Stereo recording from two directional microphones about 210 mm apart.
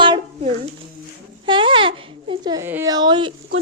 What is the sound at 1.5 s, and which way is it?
Speech, 25° right (ahead or behind).